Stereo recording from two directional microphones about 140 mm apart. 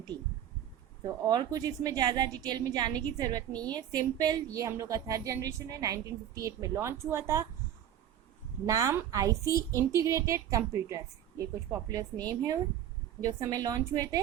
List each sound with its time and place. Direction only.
1.0 s a woman's voice: 30° right (ahead or behind)
3.5 s a woman's voice: 10° left (ahead or behind)
3.8 s a woman's voice: 25° right (ahead or behind)
8.6 s a woman's voice: 25° right (ahead or behind)